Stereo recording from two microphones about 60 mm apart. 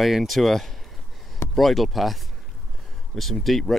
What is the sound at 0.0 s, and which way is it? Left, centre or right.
Speech, centre.